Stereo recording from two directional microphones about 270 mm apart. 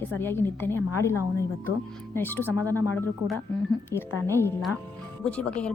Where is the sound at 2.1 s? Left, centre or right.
Centre.